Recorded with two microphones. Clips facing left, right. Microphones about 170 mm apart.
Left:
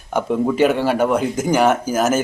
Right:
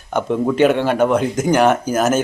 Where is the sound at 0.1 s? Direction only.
5° left (ahead or behind).